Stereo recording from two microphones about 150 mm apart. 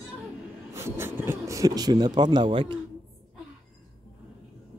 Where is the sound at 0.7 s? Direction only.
15° right (ahead or behind).